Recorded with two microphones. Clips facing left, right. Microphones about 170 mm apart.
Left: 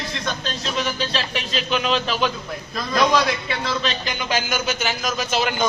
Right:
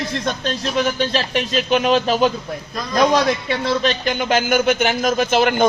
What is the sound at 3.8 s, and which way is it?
A man's voice, 50° right (ahead or behind).